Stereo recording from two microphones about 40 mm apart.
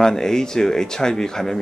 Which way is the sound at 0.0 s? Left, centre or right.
Centre.